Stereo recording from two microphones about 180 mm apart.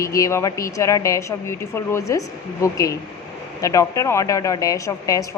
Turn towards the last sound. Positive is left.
turn(degrees=20)  # may be behind; listen again after turning